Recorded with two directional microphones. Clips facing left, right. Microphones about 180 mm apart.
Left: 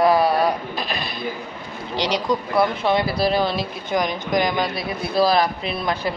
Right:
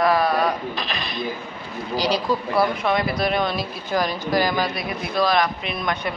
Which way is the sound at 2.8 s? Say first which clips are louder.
Left 2 dB; 30° left (ahead or behind).